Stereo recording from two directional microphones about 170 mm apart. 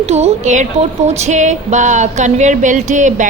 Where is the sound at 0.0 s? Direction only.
40° right (ahead or behind).